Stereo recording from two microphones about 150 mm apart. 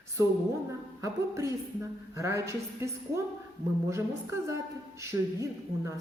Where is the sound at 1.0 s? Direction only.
20° right (ahead or behind).